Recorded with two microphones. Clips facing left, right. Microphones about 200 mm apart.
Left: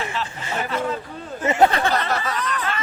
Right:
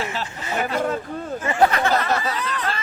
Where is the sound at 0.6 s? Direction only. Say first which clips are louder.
Right 2 dB; 40° right (ahead or behind).